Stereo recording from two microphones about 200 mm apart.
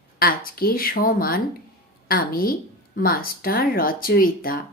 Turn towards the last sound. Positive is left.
turn(degrees=45)  # may be behind; listen again after turning